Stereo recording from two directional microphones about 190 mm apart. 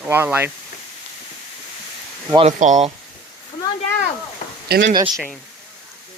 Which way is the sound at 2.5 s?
40° right (ahead or behind).